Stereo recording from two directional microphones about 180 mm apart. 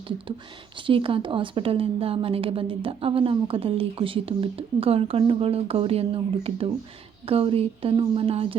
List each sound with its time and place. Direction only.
0.8 s a woman's voice: 30° right (ahead or behind)